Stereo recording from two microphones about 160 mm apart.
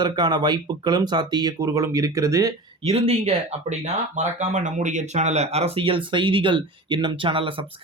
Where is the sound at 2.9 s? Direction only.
40° right (ahead or behind).